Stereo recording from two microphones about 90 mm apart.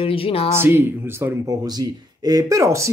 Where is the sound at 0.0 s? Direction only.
90° left.